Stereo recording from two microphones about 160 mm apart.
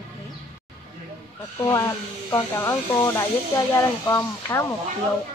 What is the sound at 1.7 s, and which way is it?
Speech, 20° left (ahead or behind).